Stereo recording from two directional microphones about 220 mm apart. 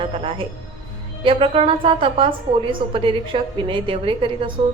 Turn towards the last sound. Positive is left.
turn(degrees=-25)  # may be behind; listen again after turning